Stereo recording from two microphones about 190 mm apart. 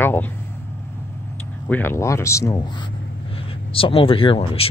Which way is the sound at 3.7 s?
30° left (ahead or behind).